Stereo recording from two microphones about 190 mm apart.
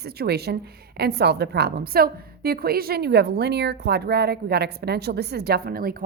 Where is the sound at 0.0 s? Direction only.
55° right (ahead or behind).